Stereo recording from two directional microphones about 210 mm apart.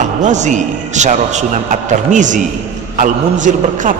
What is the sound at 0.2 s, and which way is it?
A man's voice, 35° right (ahead or behind).